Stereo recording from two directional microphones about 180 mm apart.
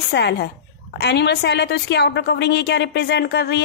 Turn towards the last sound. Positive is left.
turn(degrees=65)  # may be behind; listen again after turning